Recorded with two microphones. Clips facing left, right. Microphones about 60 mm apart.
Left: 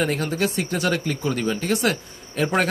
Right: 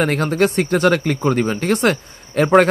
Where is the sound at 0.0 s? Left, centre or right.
Right.